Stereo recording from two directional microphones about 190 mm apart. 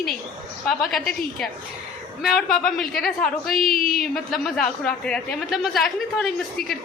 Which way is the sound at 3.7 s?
50° left (ahead or behind).